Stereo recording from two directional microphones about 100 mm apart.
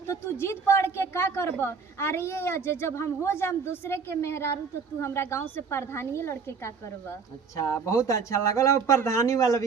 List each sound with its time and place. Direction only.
0.1 s a woman's voice: 25° left (ahead or behind)
7.5 s speech: 30° left (ahead or behind)